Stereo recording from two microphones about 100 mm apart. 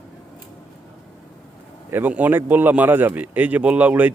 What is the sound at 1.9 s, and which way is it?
A man's voice, 20° right (ahead or behind).